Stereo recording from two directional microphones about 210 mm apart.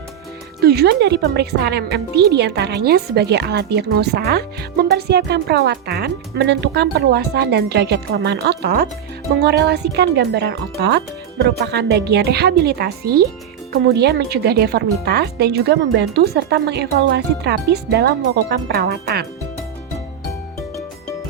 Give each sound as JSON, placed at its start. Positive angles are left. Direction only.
{"t": 0.6, "sound": "a woman's voice", "side_deg": -50}